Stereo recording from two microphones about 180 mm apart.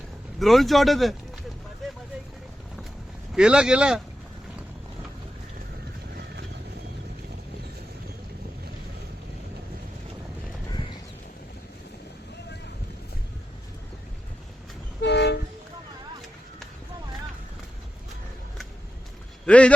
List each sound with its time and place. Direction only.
0.3 s speech: centre (ahead or behind)
1.8 s vehicle: centre (ahead or behind)
3.3 s speech: 5° right (ahead or behind)
15.0 s train: 70° left (ahead or behind)
19.5 s speech: 5° left (ahead or behind)